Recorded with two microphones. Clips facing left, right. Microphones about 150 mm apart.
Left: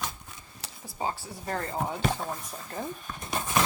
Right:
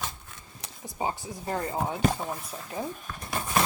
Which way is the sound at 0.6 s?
20° right (ahead or behind).